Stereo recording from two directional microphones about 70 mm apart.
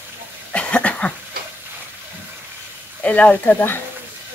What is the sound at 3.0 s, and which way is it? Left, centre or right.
Speech, centre.